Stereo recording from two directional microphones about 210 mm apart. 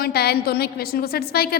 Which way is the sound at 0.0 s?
50° left (ahead or behind).